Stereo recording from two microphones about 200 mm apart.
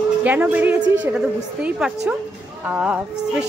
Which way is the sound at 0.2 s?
10° right (ahead or behind).